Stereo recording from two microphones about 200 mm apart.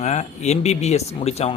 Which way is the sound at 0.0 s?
35° left (ahead or behind).